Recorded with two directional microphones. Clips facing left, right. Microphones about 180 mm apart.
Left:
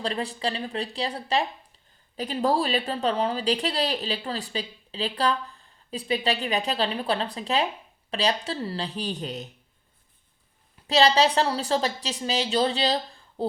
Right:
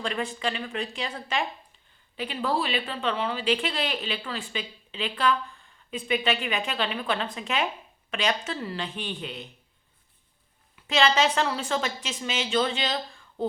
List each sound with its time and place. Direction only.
0.0 s speech: 35° left (ahead or behind)
10.8 s speech: 35° left (ahead or behind)